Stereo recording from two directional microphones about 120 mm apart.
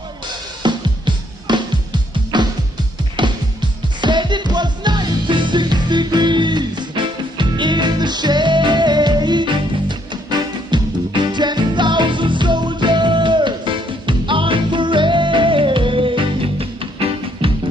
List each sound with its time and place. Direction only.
0.6 s music: 40° right (ahead or behind)
17.4 s music: 50° right (ahead or behind)